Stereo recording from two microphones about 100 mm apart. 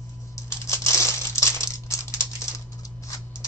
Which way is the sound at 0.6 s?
30° left (ahead or behind).